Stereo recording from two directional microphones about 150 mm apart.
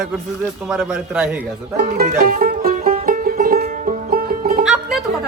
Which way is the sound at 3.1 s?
65° right (ahead or behind).